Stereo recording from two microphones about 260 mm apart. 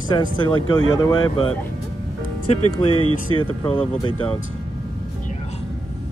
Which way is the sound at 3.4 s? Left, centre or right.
Centre.